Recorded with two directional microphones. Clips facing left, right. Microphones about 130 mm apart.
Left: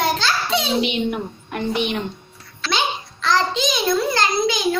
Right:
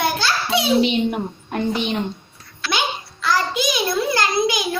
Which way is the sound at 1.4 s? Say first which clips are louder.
Even; 30° right (ahead or behind).